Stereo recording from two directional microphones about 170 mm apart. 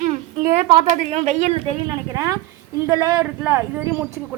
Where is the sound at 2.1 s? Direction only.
20° right (ahead or behind).